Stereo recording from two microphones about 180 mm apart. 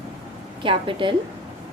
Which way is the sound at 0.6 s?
30° right (ahead or behind).